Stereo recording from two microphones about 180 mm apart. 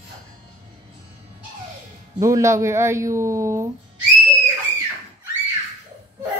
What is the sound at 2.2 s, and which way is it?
Speech, 15° right (ahead or behind).